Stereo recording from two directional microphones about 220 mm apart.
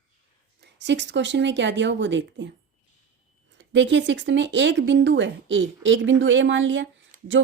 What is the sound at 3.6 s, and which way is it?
A woman's voice, 55° right (ahead or behind).